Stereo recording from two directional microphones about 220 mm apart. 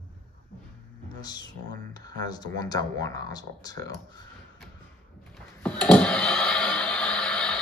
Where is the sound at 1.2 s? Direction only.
20° left (ahead or behind).